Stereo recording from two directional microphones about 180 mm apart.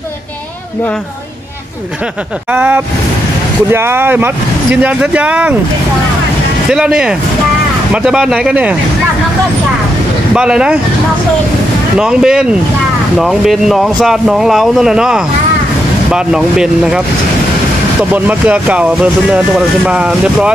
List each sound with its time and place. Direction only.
2.5 s speech: 10° right (ahead or behind)
6.7 s speech: 5° right (ahead or behind)
10.3 s speech: 5° right (ahead or behind)
12.0 s speech: 5° right (ahead or behind)
18.1 s speech: 10° right (ahead or behind)